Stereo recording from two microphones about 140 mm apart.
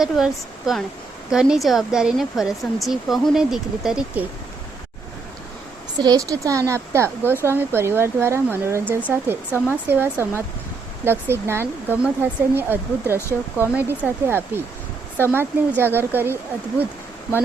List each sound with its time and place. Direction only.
0.0 s speech: centre (ahead or behind)
6.0 s a woman's voice: 25° right (ahead or behind)